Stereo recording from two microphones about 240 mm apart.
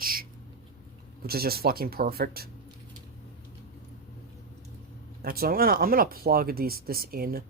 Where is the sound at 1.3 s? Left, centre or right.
Right.